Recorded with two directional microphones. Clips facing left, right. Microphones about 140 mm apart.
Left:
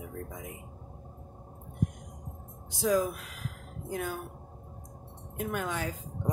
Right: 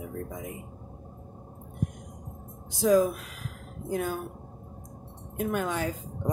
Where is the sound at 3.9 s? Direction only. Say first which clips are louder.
Right 5 dB; 35° right (ahead or behind).